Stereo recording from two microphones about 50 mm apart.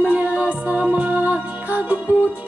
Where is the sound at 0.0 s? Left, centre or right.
Right.